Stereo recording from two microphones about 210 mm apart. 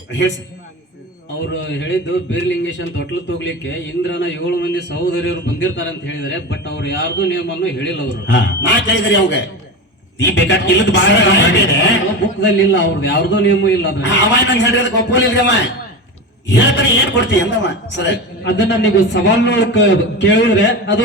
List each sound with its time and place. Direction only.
0.1 s a man's voice: 60° left (ahead or behind)
1.7 s a man's voice: 60° left (ahead or behind)